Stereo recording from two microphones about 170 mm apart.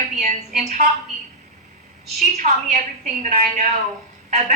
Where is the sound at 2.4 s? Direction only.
50° right (ahead or behind).